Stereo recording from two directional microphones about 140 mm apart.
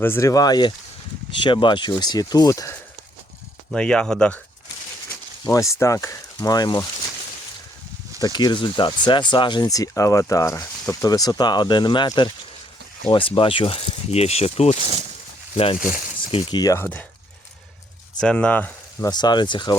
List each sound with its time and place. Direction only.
0.0 s speech: 20° left (ahead or behind)
3.7 s speech: 5° left (ahead or behind)
5.0 s speech: 20° left (ahead or behind)
8.2 s speech: 30° left (ahead or behind)
16.3 s speech: 30° left (ahead or behind); by 17.1 s 15° left (ahead or behind)
18.2 s speech: 10° left (ahead or behind)
19.1 s speech: 30° left (ahead or behind)